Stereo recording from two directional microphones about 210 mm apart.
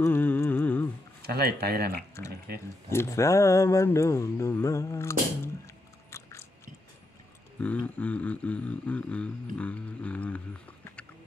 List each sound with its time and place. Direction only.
0.0 s music: 10° left (ahead or behind)
1.2 s speech: 50° right (ahead or behind)
2.9 s speech: 15° left (ahead or behind)
6.0 s biting: 15° left (ahead or behind)
7.6 s speech: 5° left (ahead or behind)